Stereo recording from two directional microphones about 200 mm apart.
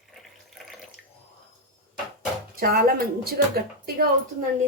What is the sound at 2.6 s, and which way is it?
A woman's voice, 45° right (ahead or behind).